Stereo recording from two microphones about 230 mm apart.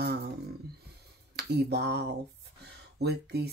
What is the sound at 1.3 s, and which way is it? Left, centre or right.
Speech, right.